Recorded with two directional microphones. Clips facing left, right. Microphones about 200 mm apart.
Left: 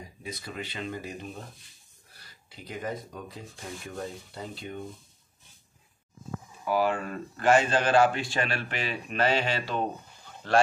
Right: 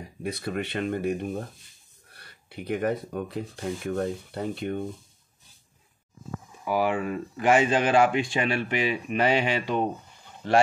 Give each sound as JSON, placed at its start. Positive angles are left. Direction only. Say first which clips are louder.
{"t": 0.2, "sound": "speech", "louder": "right 8 dB", "side_deg": -65}
{"t": 6.6, "sound": "speech", "louder": "right 1 dB", "side_deg": -15}